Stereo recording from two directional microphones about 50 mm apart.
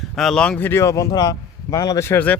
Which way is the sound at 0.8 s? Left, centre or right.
Left.